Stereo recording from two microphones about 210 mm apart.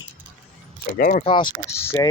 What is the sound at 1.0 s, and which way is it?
Speech, 40° left (ahead or behind).